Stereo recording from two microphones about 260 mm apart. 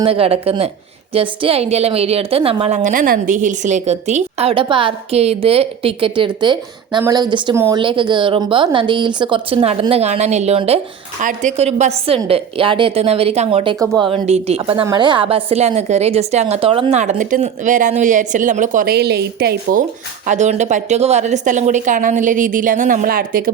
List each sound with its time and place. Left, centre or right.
0.0 s a woman's voice: right